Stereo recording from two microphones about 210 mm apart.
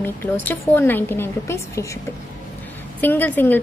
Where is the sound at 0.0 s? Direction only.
10° left (ahead or behind).